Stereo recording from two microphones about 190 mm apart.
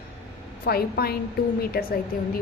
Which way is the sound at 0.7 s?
55° left (ahead or behind).